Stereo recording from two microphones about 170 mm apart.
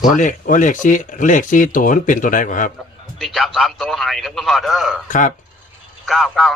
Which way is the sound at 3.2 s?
Centre (ahead or behind).